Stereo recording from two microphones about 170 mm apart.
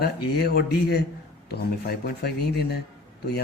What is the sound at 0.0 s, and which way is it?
Speech, 70° left (ahead or behind).